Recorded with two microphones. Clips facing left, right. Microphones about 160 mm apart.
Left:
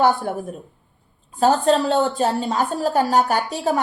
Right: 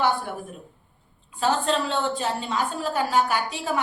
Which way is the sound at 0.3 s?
40° left (ahead or behind).